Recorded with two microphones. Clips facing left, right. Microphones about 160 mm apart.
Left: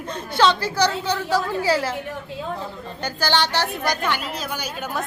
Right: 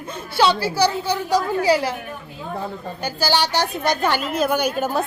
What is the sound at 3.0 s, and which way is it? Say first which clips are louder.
Speech: right 1 dB; 10° right (ahead or behind).